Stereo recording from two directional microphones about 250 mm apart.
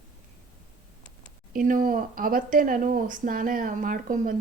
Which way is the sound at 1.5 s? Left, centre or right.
Right.